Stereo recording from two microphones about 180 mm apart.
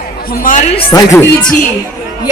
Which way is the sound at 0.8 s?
25° left (ahead or behind).